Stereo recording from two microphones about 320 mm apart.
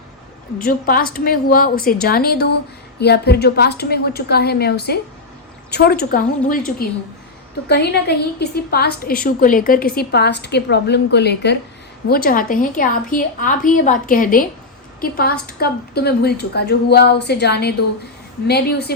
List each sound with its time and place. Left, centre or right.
0.6 s a woman's voice: left